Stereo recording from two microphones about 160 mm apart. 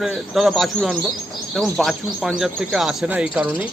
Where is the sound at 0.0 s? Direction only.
Centre (ahead or behind).